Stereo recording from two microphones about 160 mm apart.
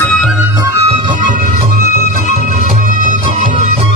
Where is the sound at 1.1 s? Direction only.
60° right (ahead or behind).